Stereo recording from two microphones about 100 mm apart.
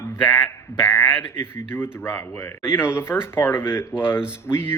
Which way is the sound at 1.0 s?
20° left (ahead or behind).